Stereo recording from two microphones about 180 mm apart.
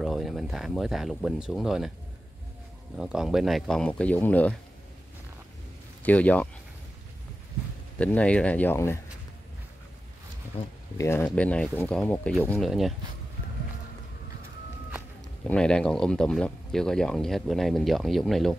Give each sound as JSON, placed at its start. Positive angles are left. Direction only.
{"t": 0.0, "sound": "speech", "side_deg": 0}
{"t": 3.0, "sound": "speech", "side_deg": 0}
{"t": 6.0, "sound": "speech", "side_deg": 10}
{"t": 8.0, "sound": "speech", "side_deg": 5}
{"t": 11.0, "sound": "speech", "side_deg": 15}
{"t": 15.4, "sound": "speech", "side_deg": 5}